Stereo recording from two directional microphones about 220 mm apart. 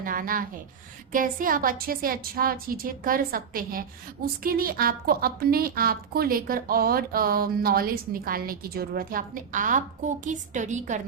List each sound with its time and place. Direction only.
0.0 s rub: 40° right (ahead or behind)
1.1 s a woman's voice: 40° right (ahead or behind)